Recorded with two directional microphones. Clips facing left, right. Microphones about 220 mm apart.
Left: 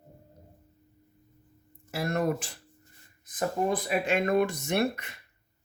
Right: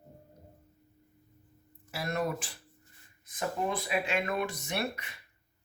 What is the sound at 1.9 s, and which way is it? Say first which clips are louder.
Speech: left 5 dB; 50° left (ahead or behind).